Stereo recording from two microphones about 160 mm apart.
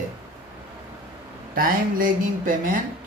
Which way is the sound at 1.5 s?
60° right (ahead or behind).